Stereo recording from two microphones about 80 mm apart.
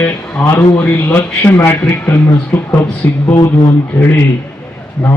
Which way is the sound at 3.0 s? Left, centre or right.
Left.